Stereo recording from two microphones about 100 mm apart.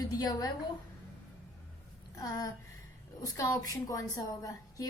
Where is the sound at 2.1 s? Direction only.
35° left (ahead or behind).